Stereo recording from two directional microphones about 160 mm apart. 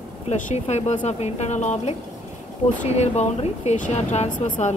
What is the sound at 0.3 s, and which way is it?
A woman's voice, 45° left (ahead or behind).